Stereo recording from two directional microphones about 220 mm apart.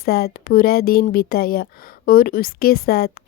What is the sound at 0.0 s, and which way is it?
Speech, 45° left (ahead or behind).